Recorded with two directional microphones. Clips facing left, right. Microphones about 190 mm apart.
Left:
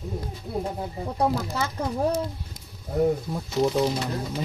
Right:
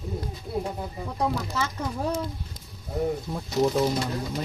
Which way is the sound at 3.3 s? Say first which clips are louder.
Even; centre (ahead or behind).